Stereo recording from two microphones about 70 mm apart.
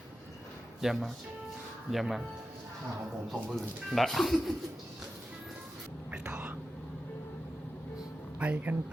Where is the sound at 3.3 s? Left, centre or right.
Centre.